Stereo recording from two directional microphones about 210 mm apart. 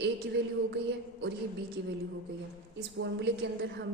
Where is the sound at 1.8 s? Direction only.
55° right (ahead or behind).